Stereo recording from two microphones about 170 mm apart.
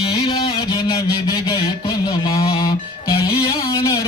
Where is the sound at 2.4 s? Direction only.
35° left (ahead or behind).